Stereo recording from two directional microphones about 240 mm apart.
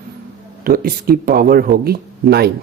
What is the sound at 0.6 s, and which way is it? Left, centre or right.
Speech, right.